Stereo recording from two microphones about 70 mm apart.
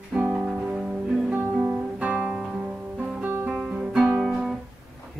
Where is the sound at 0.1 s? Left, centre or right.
Right.